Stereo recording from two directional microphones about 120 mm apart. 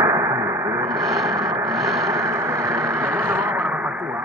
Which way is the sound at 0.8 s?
Centre (ahead or behind).